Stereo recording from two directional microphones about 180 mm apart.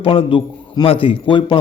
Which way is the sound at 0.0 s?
30° left (ahead or behind).